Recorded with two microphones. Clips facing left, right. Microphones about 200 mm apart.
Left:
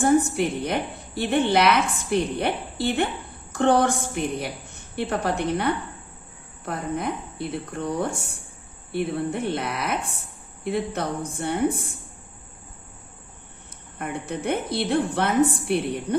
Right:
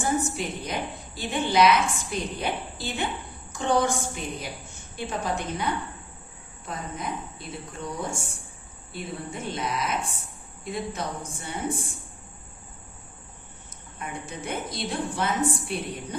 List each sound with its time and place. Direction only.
0.0 s a woman's voice: 60° left (ahead or behind)
14.0 s a woman's voice: 60° left (ahead or behind)